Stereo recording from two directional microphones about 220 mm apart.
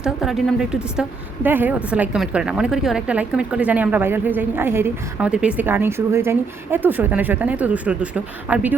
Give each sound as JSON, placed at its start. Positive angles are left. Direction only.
{"t": 0.0, "sound": "a woman's voice", "side_deg": 0}